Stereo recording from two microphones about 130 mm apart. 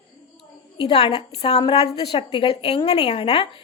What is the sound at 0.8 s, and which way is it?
A woman's voice, 45° left (ahead or behind).